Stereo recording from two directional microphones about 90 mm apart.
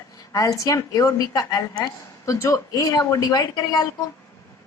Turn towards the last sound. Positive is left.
turn(degrees=45)  # may be behind; listen again after turning